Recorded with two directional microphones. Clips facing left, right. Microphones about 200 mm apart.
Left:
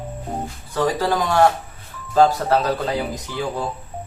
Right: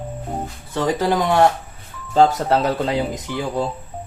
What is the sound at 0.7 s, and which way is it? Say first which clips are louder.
Speech: right 1 dB; 20° right (ahead or behind).